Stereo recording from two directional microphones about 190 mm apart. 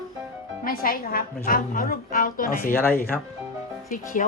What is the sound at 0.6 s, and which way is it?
A woman's voice, 50° left (ahead or behind).